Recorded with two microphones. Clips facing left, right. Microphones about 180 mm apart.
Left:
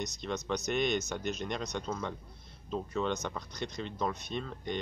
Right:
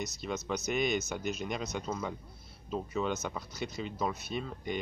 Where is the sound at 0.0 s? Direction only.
5° right (ahead or behind).